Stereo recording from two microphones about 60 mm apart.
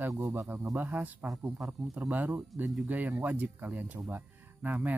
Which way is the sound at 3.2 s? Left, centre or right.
Right.